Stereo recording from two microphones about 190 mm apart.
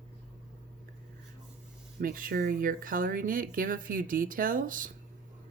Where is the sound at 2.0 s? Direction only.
50° right (ahead or behind).